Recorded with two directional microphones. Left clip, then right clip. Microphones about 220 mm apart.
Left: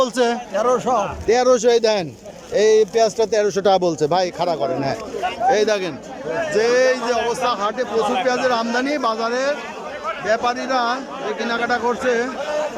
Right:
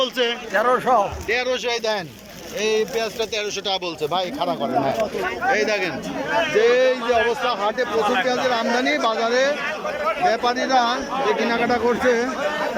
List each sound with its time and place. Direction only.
0.0 s speech: 20° left (ahead or behind)
1.3 s speech: 25° left (ahead or behind)
6.6 s speech: centre (ahead or behind)